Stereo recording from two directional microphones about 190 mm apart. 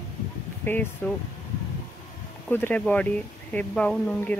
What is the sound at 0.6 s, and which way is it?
Speech, 10° left (ahead or behind).